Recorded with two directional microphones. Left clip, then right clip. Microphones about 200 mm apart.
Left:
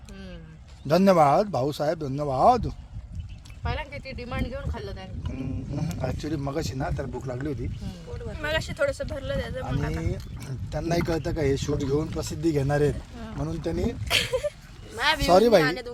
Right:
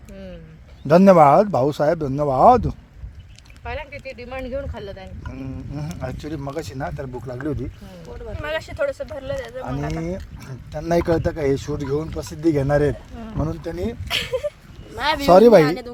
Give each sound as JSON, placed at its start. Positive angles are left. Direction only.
{"t": 0.9, "sound": "speech", "side_deg": -40}
{"t": 3.6, "sound": "speech", "side_deg": 20}
{"t": 5.7, "sound": "speech", "side_deg": -35}
{"t": 8.4, "sound": "speech", "side_deg": 0}
{"t": 10.7, "sound": "speech", "side_deg": -40}
{"t": 14.1, "sound": "speech", "side_deg": -5}
{"t": 14.9, "sound": "speech", "side_deg": -25}
{"t": 15.3, "sound": "speech", "side_deg": -45}
{"t": 15.6, "sound": "speech", "side_deg": -25}